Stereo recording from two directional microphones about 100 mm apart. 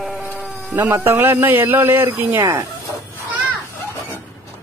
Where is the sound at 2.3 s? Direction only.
35° right (ahead or behind).